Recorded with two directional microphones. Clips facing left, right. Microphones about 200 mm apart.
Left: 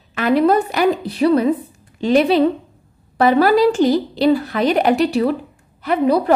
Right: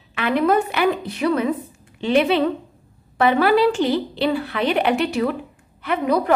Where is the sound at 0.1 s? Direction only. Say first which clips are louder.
Left 4 dB; 40° left (ahead or behind).